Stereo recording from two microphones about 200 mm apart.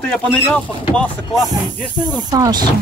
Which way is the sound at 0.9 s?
5° left (ahead or behind).